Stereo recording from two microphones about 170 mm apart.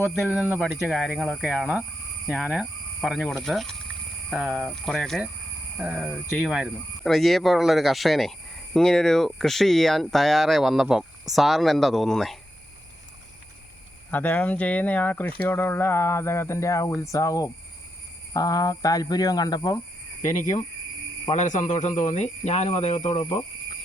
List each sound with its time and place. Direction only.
0.1 s speech: 5° right (ahead or behind)
5.7 s speech: 10° right (ahead or behind)
14.1 s speech: 10° left (ahead or behind)
21.2 s speech: 45° left (ahead or behind)